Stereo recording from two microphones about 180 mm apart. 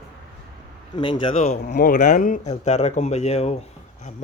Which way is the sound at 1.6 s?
55° left (ahead or behind).